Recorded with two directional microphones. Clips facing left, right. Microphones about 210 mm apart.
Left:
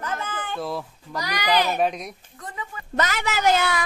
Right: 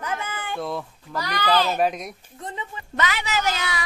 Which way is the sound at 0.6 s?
Centre (ahead or behind).